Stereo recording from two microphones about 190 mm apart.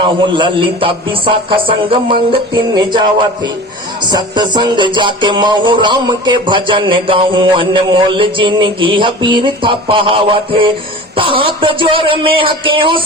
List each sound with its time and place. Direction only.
0.0 s music: 25° right (ahead or behind)
4.1 s music: 25° right (ahead or behind)